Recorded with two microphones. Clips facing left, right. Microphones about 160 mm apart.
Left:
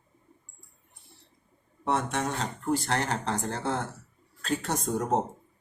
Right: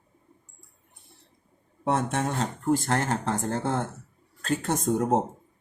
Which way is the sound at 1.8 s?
50° right (ahead or behind).